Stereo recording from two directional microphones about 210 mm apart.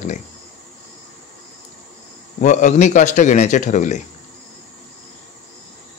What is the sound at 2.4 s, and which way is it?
A man's voice, 35° left (ahead or behind).